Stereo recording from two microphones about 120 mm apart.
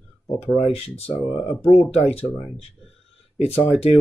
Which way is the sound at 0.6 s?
55° left (ahead or behind).